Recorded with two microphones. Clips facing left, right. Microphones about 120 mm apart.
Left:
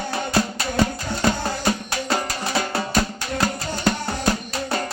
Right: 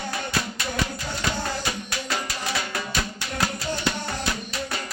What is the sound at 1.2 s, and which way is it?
Music, 45° left (ahead or behind).